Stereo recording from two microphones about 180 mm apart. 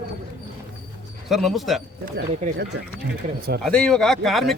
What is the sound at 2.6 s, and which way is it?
Speech, 65° right (ahead or behind).